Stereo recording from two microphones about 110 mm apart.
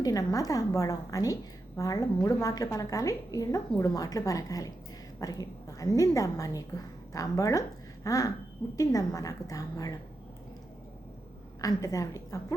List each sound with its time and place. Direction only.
0.0 s a woman's voice: 35° left (ahead or behind)
11.6 s a woman's voice: 30° left (ahead or behind)